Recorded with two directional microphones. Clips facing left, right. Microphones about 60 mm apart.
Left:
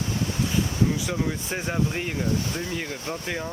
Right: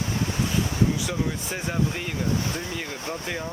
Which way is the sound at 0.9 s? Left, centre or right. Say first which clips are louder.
Even; left.